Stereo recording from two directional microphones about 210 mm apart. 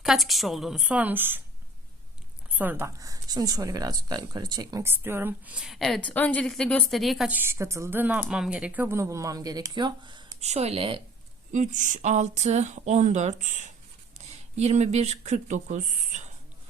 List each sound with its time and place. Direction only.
0.0 s a woman's voice: centre (ahead or behind)
2.5 s speech: 10° right (ahead or behind); by 11.0 s 25° right (ahead or behind)
11.5 s speech: 35° right (ahead or behind)